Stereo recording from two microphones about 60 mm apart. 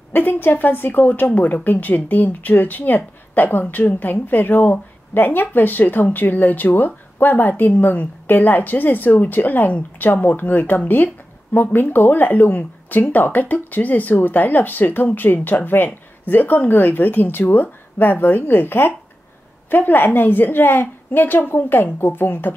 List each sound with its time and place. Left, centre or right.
0.1 s a woman's voice: left